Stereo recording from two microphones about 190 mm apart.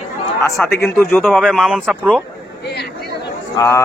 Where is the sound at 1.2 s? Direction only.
Centre (ahead or behind).